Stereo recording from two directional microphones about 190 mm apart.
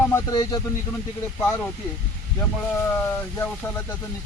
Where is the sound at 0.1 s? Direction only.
15° left (ahead or behind).